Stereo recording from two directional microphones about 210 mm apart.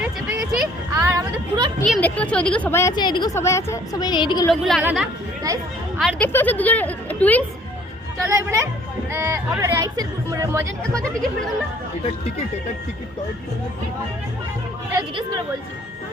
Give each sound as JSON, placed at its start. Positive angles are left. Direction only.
{"t": 0.9, "sound": "speech", "side_deg": -15}
{"t": 1.9, "sound": "a woman's voice", "side_deg": 5}
{"t": 4.4, "sound": "speech", "side_deg": 5}
{"t": 4.8, "sound": "speech", "side_deg": -10}
{"t": 6.0, "sound": "a woman's voice", "side_deg": 5}
{"t": 8.2, "sound": "speech", "side_deg": -15}
{"t": 14.9, "sound": "speech", "side_deg": -20}